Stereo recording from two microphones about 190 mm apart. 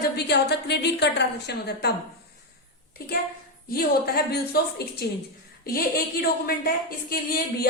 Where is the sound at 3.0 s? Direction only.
55° left (ahead or behind).